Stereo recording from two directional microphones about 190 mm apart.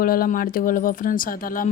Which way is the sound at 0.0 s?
50° left (ahead or behind).